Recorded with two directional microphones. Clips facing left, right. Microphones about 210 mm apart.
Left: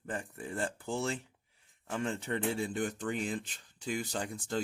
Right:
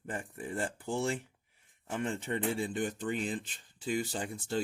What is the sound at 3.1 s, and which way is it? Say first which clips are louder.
Speech: right 1 dB; 40° left (ahead or behind).